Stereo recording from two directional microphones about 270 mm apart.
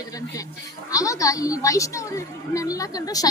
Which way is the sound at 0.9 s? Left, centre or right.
Centre.